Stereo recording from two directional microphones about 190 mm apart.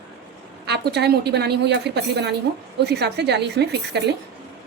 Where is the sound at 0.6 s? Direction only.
60° right (ahead or behind).